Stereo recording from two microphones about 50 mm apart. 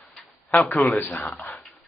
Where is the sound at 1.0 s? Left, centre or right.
Left.